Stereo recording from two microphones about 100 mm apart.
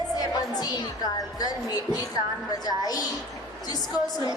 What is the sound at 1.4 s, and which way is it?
A woman's voice, 40° left (ahead or behind).